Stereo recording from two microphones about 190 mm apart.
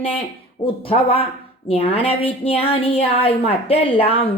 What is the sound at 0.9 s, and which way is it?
A woman's voice, 30° left (ahead or behind).